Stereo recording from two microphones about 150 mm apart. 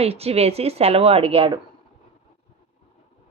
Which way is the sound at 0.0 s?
40° right (ahead or behind).